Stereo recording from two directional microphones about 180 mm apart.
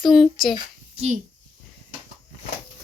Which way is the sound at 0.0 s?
Centre (ahead or behind).